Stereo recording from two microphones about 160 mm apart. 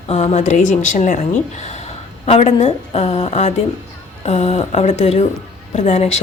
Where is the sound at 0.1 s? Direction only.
40° left (ahead or behind).